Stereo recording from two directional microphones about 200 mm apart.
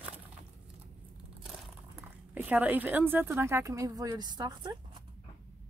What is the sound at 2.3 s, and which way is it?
A woman's voice, 10° right (ahead or behind).